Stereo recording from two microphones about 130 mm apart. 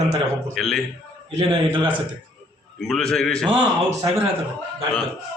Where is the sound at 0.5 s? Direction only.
Centre (ahead or behind).